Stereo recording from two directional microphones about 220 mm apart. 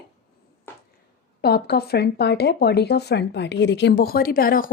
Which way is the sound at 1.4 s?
45° left (ahead or behind).